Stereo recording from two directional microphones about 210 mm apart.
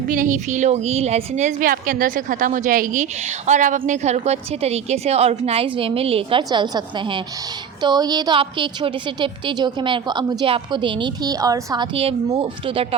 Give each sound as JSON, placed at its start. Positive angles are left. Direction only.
{"t": 0.1, "sound": "a woman's voice", "side_deg": -40}